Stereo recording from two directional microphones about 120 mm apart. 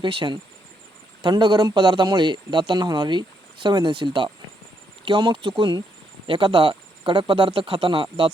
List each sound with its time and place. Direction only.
0.0 s a man's voice: 45° right (ahead or behind)